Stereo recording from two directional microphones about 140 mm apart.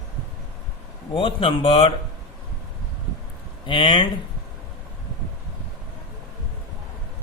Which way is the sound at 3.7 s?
35° left (ahead or behind).